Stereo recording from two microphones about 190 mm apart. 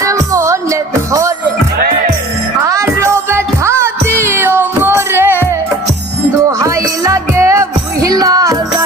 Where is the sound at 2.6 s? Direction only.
15° right (ahead or behind).